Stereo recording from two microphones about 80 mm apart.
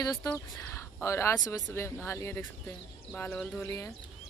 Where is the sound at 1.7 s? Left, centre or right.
Left.